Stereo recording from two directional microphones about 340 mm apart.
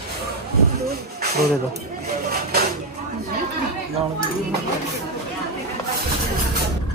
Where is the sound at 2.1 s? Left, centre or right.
Right.